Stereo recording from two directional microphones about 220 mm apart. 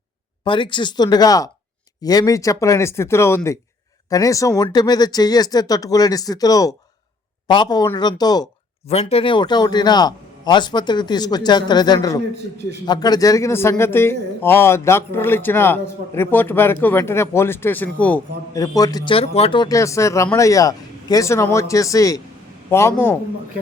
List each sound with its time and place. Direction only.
0.4 s a man's voice: 20° left (ahead or behind)
8.9 s a man's voice: 30° left (ahead or behind); by 23.1 s 10° left (ahead or behind)